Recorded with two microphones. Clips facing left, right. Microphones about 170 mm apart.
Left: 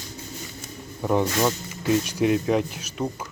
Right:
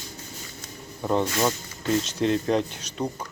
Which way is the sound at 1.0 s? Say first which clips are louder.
Left 2 dB; 10° left (ahead or behind).